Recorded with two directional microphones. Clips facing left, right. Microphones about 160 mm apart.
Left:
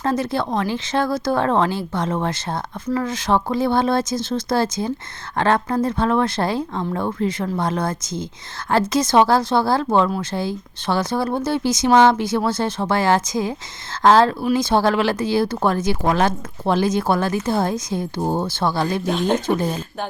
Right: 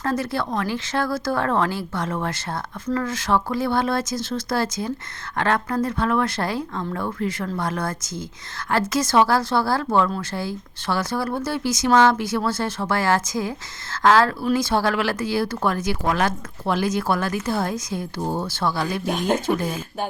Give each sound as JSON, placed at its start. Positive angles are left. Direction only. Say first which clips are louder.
{"t": 0.0, "sound": "speech", "louder": "left 3 dB", "side_deg": 20}
{"t": 19.0, "sound": "speech", "louder": "left 1 dB", "side_deg": -10}